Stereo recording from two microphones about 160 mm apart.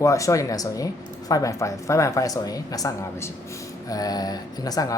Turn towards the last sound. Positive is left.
turn(degrees=25)  # may be behind; listen again after turning